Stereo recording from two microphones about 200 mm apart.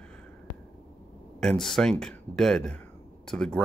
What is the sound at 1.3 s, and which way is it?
Speech, centre (ahead or behind).